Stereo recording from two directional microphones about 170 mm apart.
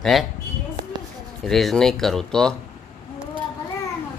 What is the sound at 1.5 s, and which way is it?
Speech, centre (ahead or behind).